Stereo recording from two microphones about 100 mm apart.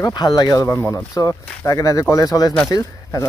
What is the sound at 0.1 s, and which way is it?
Speech, 45° left (ahead or behind).